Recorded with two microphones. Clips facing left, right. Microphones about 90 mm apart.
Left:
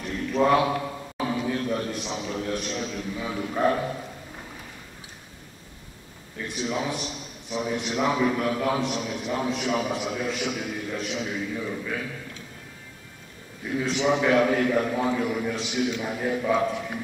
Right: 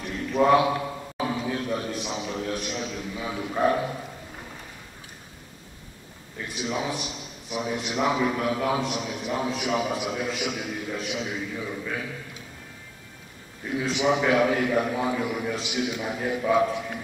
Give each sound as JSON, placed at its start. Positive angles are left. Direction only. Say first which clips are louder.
{"t": 0.0, "sound": "a sound", "louder": "right 1 dB", "side_deg": -10}
{"t": 6.3, "sound": "a man's voice", "louder": "left 1 dB", "side_deg": -5}
{"t": 13.7, "sound": "a man's voice", "louder": "even", "side_deg": -5}